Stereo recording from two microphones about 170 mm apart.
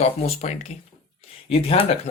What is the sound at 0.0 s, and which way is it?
Speech, 40° left (ahead or behind).